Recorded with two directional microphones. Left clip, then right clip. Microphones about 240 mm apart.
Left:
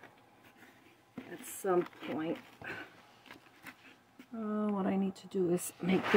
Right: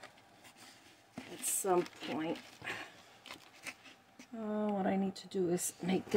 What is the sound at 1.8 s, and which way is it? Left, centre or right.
Speech, centre.